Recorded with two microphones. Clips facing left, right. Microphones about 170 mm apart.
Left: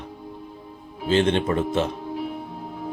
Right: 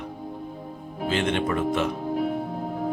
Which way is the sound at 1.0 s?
30° left (ahead or behind).